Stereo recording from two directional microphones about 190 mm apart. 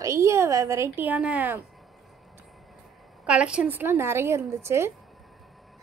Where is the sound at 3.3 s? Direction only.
5° right (ahead or behind).